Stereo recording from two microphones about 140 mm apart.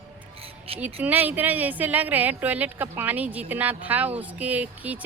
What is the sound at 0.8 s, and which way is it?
Speech, 10° right (ahead or behind).